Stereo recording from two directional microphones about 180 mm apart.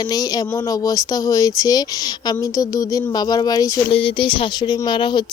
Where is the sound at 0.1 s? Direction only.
20° left (ahead or behind).